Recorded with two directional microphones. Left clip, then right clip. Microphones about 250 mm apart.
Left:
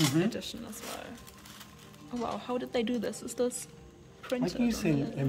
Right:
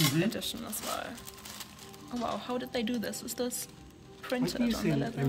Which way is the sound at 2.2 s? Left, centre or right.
Centre.